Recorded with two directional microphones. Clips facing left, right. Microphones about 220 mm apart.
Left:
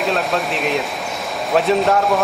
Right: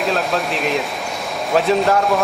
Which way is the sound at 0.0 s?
Centre (ahead or behind).